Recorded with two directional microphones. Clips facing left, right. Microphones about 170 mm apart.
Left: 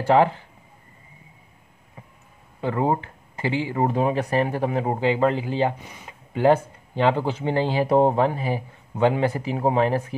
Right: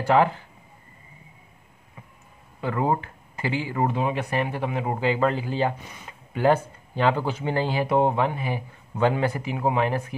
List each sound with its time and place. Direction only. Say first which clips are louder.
0.0 s speech: left 2 dB; 30° left (ahead or behind)
2.6 s speech: left 2 dB; 30° left (ahead or behind)
3.9 s speech: left 4 dB; 40° left (ahead or behind)
5.0 s speech: left 2 dB; 25° left (ahead or behind)